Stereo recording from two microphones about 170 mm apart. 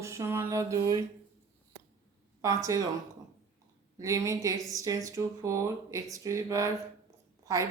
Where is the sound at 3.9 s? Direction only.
20° right (ahead or behind).